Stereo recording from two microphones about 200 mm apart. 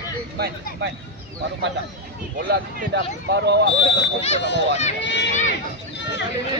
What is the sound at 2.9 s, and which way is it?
Speech, 60° right (ahead or behind).